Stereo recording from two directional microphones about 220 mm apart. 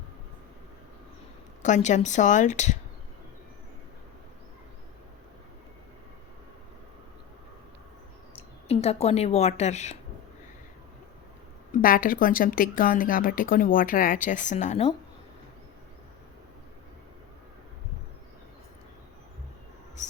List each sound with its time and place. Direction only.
1.6 s speech: 35° left (ahead or behind)
8.4 s a woman's voice: 30° left (ahead or behind)
11.7 s speech: 40° left (ahead or behind)